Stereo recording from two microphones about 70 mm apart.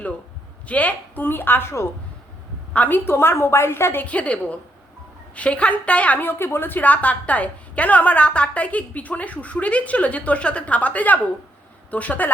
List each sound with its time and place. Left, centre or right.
0.7 s a woman's voice: left
2.7 s a woman's voice: left
4.0 s a woman's voice: centre